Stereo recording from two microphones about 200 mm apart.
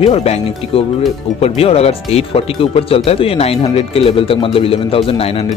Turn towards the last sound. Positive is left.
turn(degrees=30)  # may be behind; listen again after turning